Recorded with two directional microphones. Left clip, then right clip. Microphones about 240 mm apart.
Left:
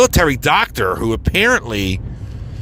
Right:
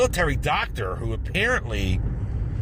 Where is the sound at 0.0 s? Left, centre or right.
Left.